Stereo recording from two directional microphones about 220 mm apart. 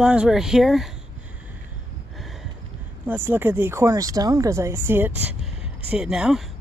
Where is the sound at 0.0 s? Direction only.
5° right (ahead or behind).